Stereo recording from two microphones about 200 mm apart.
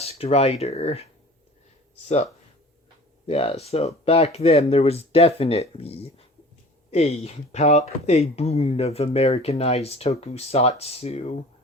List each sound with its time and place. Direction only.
0.0 s speech: 30° left (ahead or behind)
3.2 s speech: 30° left (ahead or behind)